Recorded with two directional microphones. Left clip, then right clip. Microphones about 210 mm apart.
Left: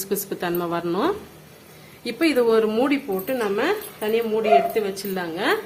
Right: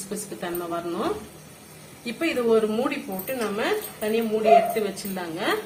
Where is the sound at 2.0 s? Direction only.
50° left (ahead or behind).